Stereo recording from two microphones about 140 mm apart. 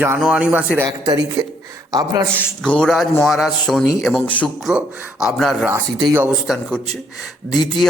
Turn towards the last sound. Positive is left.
turn(degrees=0)  # may be behind; listen again after turning